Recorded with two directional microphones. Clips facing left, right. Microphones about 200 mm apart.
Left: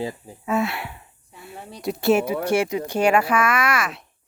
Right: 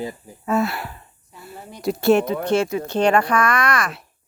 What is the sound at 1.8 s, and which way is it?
A woman's voice, centre (ahead or behind).